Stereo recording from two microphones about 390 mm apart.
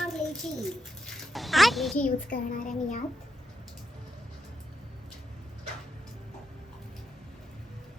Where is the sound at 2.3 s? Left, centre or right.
Left.